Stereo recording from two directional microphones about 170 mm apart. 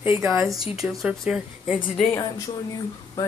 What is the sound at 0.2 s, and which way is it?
Speech, centre (ahead or behind).